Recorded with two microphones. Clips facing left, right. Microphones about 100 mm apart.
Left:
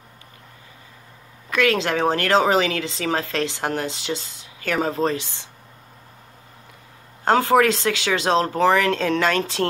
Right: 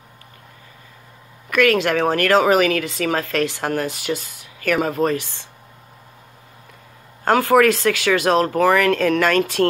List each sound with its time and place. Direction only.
1.5 s a woman's voice: 25° left (ahead or behind)
7.2 s a woman's voice: 20° left (ahead or behind)